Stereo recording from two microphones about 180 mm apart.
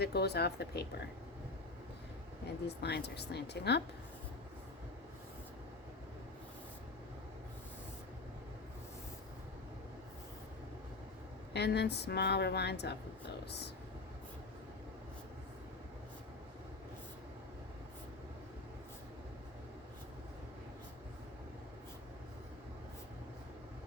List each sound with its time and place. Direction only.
0.0 s speech: 65° left (ahead or behind)
2.6 s a woman's voice: 65° left (ahead or behind)
11.5 s a woman's voice: 65° left (ahead or behind)